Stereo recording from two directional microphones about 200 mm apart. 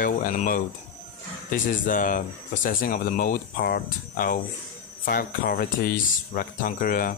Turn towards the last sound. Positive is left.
turn(degrees=45)  # may be behind; listen again after turning